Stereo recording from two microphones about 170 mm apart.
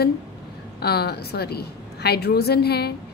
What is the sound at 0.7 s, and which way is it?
Speech, 70° left (ahead or behind).